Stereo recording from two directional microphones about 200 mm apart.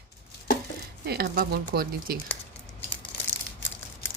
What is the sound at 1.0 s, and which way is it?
A woman's voice, 50° right (ahead or behind).